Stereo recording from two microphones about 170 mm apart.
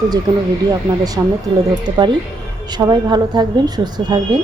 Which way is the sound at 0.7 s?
20° right (ahead or behind).